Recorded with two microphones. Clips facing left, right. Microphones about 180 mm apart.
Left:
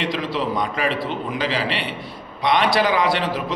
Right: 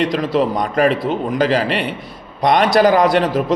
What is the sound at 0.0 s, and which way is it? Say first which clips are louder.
A man's voice: right 7 dB; 45° right (ahead or behind).